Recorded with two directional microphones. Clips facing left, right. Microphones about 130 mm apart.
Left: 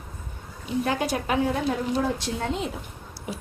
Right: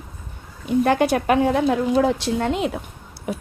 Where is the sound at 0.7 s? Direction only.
60° right (ahead or behind).